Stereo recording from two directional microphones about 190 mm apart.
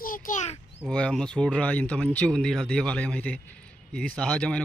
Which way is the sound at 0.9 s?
5° left (ahead or behind).